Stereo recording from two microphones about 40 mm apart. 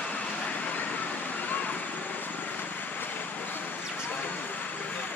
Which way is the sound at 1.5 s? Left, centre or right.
Left.